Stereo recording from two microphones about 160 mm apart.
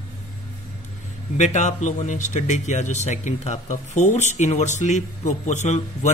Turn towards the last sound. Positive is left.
turn(degrees=45)  # may be behind; listen again after turning